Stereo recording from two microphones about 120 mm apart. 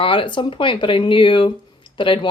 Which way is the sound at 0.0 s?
45° left (ahead or behind).